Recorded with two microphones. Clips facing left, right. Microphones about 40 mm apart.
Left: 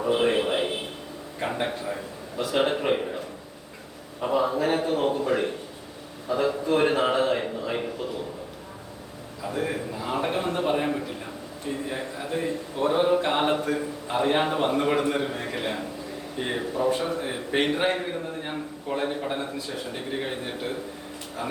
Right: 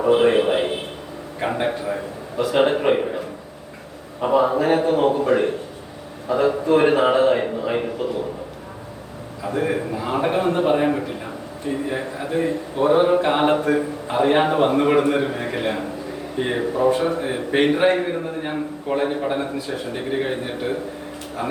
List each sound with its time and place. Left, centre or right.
0.0 s a man's voice: centre
9.4 s a man's voice: centre
20.0 s a man's voice: centre